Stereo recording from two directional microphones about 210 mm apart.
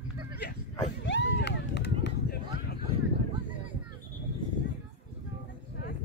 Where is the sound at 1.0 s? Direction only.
60° left (ahead or behind).